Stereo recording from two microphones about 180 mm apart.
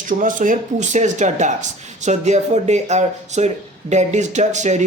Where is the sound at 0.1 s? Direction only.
45° right (ahead or behind).